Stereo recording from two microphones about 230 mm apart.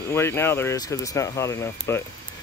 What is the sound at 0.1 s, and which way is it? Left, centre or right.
Speech, centre.